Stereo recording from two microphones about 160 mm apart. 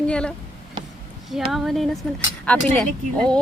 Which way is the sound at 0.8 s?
30° right (ahead or behind).